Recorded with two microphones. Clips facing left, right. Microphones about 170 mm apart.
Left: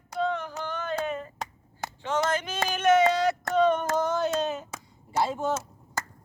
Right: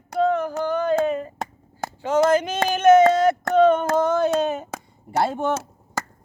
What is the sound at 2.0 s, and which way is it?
Speech, 40° right (ahead or behind).